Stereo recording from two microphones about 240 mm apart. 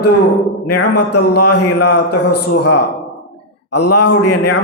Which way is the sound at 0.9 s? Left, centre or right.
Left.